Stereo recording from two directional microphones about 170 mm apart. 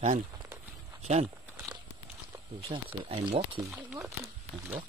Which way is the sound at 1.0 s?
40° right (ahead or behind).